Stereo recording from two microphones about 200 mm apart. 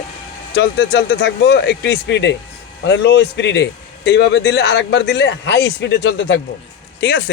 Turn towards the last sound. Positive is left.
turn(degrees=55)  # may be behind; listen again after turning